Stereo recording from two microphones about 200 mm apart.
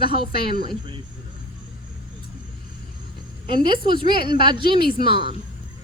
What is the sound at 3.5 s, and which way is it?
A woman's voice, 25° right (ahead or behind).